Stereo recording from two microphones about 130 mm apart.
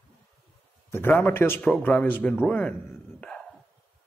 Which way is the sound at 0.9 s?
15° left (ahead or behind).